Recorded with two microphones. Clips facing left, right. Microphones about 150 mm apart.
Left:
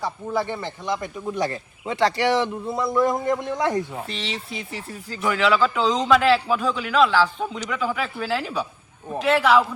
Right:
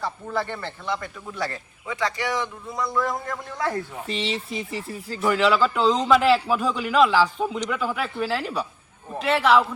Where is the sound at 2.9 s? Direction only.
20° left (ahead or behind).